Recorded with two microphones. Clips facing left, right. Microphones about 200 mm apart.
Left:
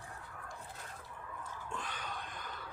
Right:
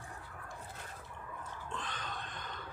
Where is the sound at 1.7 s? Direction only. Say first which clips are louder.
Even; 10° left (ahead or behind).